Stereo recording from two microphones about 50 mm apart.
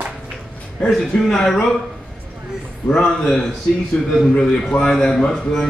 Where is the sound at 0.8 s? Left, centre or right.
Centre.